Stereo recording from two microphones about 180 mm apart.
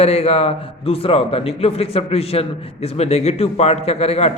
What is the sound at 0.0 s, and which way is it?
A man's voice, 35° left (ahead or behind).